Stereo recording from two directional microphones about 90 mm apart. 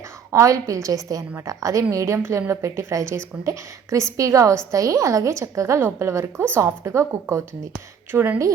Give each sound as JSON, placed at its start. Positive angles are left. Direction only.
{"t": 0.3, "sound": "a woman's voice", "side_deg": -35}
{"t": 8.1, "sound": "a woman's voice", "side_deg": -20}